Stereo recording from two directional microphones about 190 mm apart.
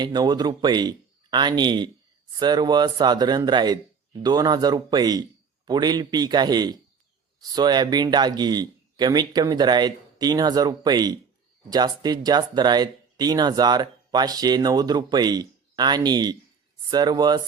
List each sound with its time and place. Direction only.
0.0 s speech: 20° right (ahead or behind)